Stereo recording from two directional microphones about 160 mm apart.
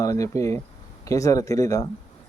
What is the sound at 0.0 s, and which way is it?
Speech, 20° left (ahead or behind).